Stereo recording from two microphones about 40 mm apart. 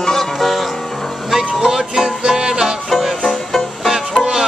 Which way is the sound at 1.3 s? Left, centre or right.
Centre.